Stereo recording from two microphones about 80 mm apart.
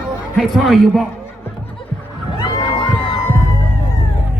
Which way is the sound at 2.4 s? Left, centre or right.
Left.